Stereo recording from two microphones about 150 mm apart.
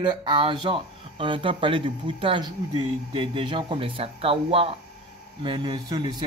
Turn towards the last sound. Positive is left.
turn(degrees=-30)  # may be behind; listen again after turning